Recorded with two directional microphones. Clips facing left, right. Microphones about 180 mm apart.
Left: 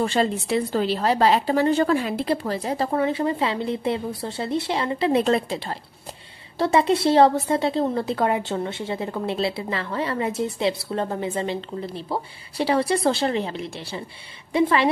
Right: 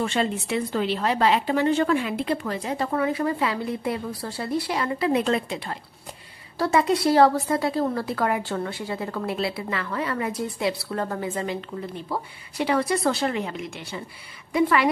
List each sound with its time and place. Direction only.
0.0 s a woman's voice: 35° left (ahead or behind)